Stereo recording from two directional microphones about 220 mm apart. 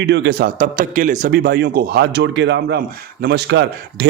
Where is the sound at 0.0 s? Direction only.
50° right (ahead or behind).